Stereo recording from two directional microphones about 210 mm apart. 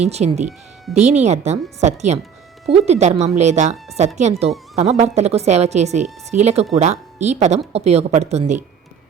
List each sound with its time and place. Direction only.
0.0 s a woman's voice: 30° right (ahead or behind)